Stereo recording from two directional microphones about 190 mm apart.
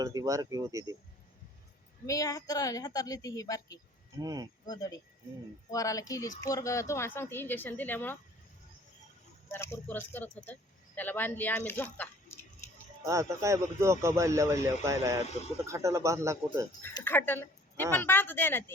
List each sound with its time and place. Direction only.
0.0 s speech: 20° right (ahead or behind)
2.0 s speech: 15° left (ahead or behind)
4.2 s speech: 20° right (ahead or behind)
4.6 s speech: 20° left (ahead or behind)
9.5 s speech: 15° left (ahead or behind)
13.1 s speech: 15° right (ahead or behind)
16.8 s speech: 10° left (ahead or behind)